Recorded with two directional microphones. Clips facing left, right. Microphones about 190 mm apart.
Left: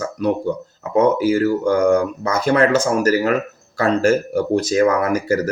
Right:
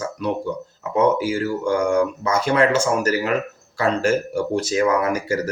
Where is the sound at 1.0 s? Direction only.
45° left (ahead or behind).